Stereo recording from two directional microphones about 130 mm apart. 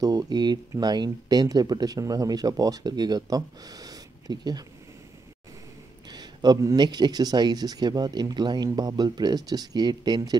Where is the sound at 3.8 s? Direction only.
30° right (ahead or behind).